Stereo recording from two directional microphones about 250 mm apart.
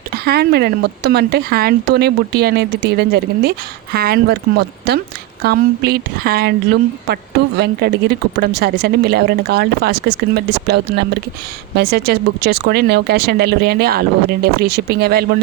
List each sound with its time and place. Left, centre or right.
0.1 s a woman's voice: right
7.6 s a woman's voice: right